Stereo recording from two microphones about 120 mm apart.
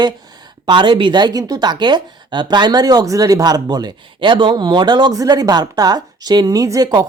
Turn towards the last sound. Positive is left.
turn(degrees=-35)  # may be behind; listen again after turning